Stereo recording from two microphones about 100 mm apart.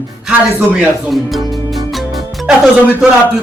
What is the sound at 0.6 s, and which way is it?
Speech, 10° right (ahead or behind).